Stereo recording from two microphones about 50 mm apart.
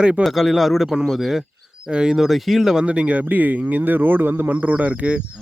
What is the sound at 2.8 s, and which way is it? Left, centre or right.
A man's voice, right.